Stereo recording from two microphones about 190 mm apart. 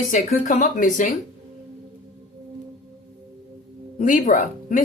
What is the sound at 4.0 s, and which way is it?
Speech, 45° left (ahead or behind).